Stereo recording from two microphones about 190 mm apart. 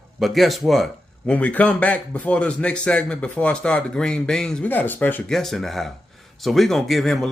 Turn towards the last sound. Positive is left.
turn(degrees=0)  # may be behind; listen again after turning